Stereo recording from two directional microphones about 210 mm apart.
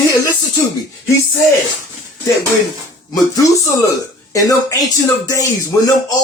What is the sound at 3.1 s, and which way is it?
Speech, 15° left (ahead or behind).